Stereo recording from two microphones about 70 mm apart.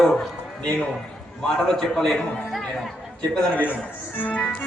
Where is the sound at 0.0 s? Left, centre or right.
Centre.